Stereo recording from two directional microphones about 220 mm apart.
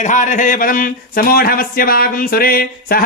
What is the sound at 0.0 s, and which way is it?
Speech, 35° left (ahead or behind).